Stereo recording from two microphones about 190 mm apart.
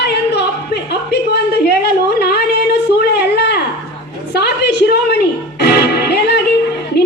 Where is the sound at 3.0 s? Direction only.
60° left (ahead or behind).